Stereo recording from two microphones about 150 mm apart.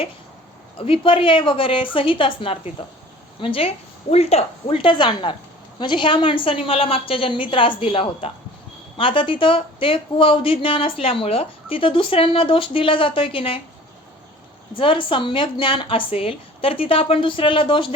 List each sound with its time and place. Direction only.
0.8 s a woman's voice: 35° left (ahead or behind)
14.8 s a woman's voice: 35° left (ahead or behind)